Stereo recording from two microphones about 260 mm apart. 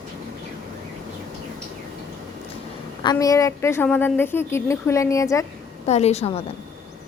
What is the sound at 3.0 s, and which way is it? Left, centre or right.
A woman's voice, centre.